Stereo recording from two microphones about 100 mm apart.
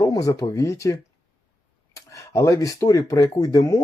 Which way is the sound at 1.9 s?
30° left (ahead or behind).